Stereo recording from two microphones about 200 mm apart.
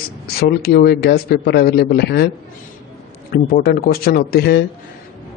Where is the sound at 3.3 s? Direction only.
50° left (ahead or behind).